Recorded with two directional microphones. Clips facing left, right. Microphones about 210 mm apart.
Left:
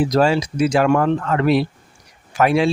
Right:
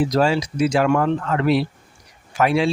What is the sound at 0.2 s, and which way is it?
Speech, 50° left (ahead or behind).